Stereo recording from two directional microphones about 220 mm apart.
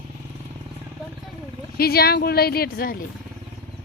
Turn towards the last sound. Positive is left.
turn(degrees=40)  # may be behind; listen again after turning